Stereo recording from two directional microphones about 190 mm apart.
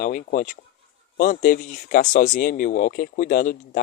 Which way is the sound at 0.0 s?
45° left (ahead or behind).